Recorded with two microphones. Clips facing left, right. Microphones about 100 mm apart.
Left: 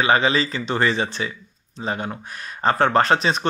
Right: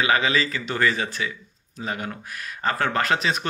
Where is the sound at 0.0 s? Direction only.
30° left (ahead or behind).